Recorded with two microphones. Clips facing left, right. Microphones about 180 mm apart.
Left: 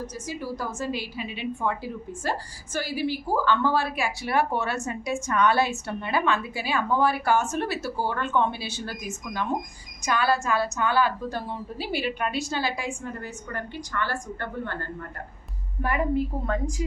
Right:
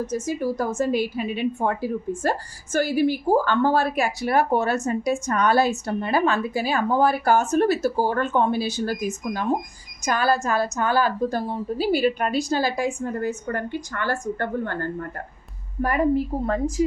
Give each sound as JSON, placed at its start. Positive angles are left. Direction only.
{"t": 0.0, "sound": "a woman's voice", "side_deg": -50}